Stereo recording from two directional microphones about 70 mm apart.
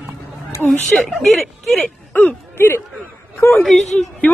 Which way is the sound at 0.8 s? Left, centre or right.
Centre.